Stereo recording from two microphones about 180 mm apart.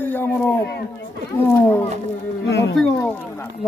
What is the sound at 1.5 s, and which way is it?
Speech, 10° left (ahead or behind).